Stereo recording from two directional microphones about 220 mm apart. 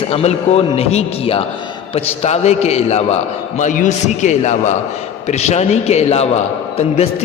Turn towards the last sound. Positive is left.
turn(degrees=30)  # may be behind; listen again after turning